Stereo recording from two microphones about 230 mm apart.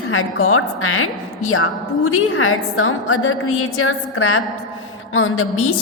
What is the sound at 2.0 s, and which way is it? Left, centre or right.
A woman's voice, left.